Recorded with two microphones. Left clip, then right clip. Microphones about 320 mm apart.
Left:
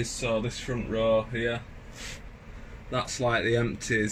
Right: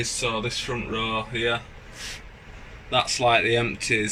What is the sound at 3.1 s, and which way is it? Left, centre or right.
Speech, right.